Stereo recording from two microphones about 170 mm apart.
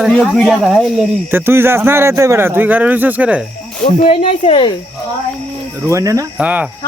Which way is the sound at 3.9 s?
35° left (ahead or behind).